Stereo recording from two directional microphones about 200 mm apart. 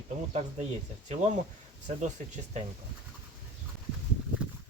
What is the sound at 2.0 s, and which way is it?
Speech, 35° right (ahead or behind).